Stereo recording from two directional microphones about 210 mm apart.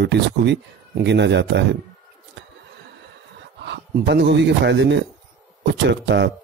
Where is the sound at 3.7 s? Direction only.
55° right (ahead or behind).